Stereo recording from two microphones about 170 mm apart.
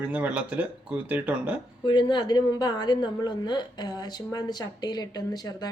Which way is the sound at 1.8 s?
25° left (ahead or behind).